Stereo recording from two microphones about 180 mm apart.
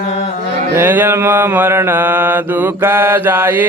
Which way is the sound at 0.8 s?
10° right (ahead or behind).